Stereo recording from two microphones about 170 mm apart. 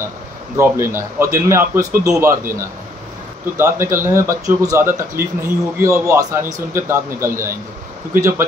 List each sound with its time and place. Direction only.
0.6 s a man's voice: 15° right (ahead or behind)
3.5 s a man's voice: 15° right (ahead or behind)